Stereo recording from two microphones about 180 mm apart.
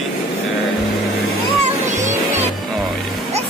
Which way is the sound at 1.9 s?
40° right (ahead or behind).